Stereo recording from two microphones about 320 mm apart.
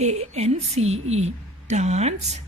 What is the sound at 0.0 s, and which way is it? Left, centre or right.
Speech, centre.